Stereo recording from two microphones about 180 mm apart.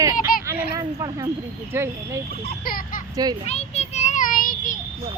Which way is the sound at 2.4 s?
55° left (ahead or behind).